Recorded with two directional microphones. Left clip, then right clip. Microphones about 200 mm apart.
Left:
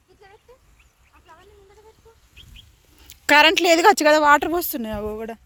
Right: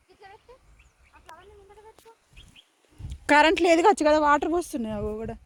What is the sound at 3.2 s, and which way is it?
Speech, 10° right (ahead or behind).